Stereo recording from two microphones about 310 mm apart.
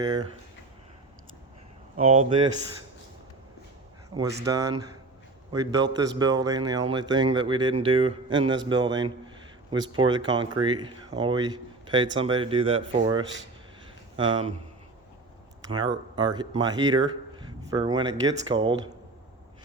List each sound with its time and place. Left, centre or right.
0.0 s speech: centre
2.0 s speech: centre
4.1 s speech: centre
15.6 s speech: centre